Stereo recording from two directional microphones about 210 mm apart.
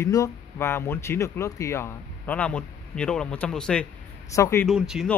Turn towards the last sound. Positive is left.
turn(degrees=-5)  # may be behind; listen again after turning